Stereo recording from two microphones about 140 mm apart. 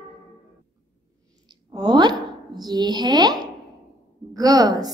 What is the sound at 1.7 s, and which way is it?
Speech, 30° right (ahead or behind).